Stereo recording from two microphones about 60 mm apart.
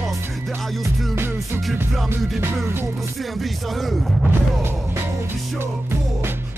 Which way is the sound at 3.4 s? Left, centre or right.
Centre.